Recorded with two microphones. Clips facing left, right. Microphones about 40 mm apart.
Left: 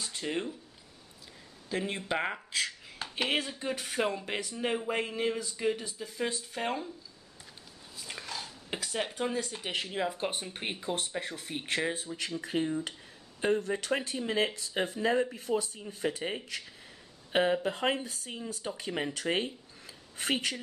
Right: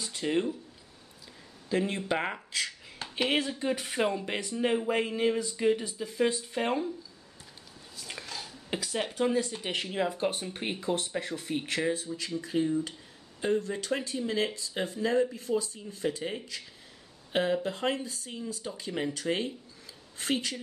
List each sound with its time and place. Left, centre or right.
0.0 s speech: centre
1.7 s speech: centre
8.1 s a sound: centre
9.2 s speech: centre
11.5 s speech: centre
15.7 s speech: left
17.3 s speech: left